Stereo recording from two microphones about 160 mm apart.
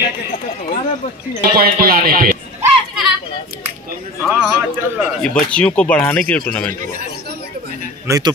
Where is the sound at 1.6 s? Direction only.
70° right (ahead or behind).